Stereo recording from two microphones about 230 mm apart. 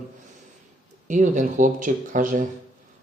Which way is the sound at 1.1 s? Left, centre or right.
Right.